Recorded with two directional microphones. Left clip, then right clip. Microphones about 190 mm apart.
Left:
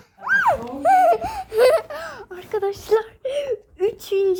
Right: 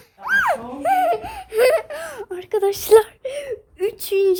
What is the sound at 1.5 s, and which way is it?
Wail, centre (ahead or behind).